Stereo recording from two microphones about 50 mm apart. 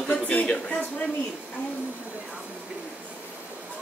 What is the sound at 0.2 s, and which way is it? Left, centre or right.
Speech, left.